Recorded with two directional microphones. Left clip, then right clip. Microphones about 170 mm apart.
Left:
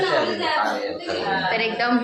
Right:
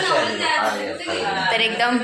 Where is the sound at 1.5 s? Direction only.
Centre (ahead or behind).